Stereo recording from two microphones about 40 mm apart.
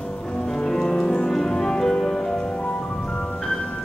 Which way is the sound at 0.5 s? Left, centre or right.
Centre.